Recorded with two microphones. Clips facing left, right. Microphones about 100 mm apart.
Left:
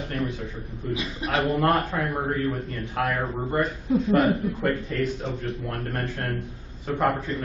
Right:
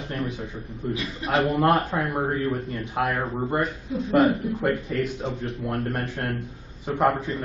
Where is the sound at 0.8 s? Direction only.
25° right (ahead or behind).